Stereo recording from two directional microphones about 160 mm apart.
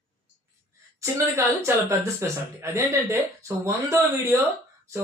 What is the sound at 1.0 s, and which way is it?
Speech, 15° right (ahead or behind).